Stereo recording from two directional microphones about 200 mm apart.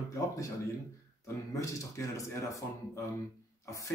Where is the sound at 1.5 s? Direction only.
15° left (ahead or behind).